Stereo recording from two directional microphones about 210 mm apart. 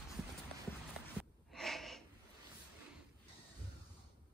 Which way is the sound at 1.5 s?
Centre (ahead or behind).